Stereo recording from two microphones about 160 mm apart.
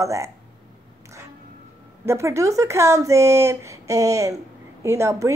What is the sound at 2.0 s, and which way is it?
A woman's voice, 15° right (ahead or behind).